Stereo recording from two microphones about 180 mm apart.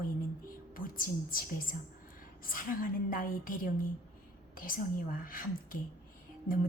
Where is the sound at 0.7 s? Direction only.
50° left (ahead or behind).